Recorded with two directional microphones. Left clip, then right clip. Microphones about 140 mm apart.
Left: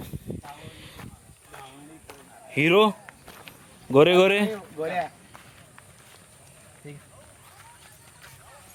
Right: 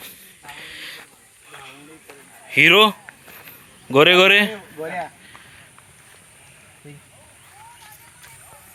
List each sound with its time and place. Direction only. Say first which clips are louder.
0.0 s hiss: left 1 dB; 15° left (ahead or behind)
1.5 s stir: right 4 dB; 25° left (ahead or behind)
2.0 s a sound: right 8 dB; 15° left (ahead or behind)